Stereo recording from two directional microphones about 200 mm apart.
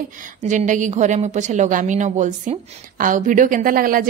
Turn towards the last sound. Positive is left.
turn(degrees=-45)  # may be behind; listen again after turning